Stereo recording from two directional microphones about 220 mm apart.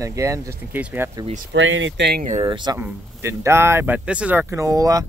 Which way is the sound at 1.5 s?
60° right (ahead or behind).